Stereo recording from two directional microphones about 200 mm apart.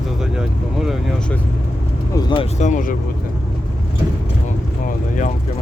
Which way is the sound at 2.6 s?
40° left (ahead or behind).